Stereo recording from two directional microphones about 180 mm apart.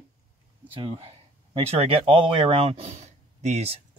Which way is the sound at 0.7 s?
30° right (ahead or behind).